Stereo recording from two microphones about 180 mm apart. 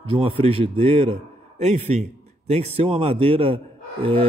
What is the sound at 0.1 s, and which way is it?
Speech, 30° right (ahead or behind).